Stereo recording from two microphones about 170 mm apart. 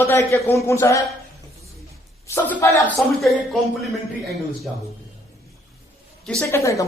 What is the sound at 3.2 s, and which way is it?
Speech, centre (ahead or behind).